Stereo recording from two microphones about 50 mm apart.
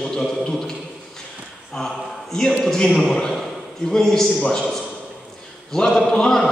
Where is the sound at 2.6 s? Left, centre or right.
Centre.